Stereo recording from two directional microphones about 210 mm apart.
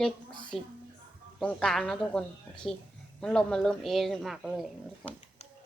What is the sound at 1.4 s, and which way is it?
Speech, 5° left (ahead or behind).